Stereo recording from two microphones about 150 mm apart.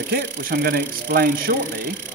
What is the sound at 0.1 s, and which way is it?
Speech, 85° right.